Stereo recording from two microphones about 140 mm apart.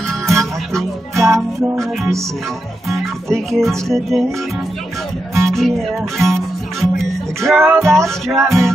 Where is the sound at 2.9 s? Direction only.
Centre (ahead or behind).